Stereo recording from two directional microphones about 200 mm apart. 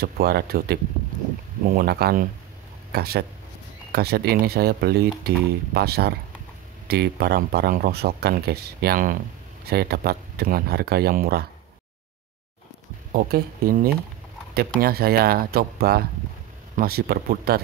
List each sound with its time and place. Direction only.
0.0 s speech: 50° right (ahead or behind)
13.1 s speech: 45° right (ahead or behind)